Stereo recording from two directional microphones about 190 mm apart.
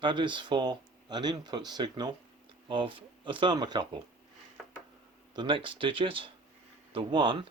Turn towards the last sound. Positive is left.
turn(degrees=-25)  # may be behind; listen again after turning